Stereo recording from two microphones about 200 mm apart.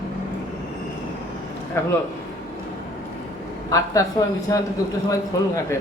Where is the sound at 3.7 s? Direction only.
15° left (ahead or behind).